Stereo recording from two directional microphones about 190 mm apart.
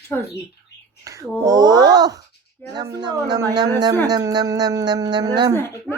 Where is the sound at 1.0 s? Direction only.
15° right (ahead or behind).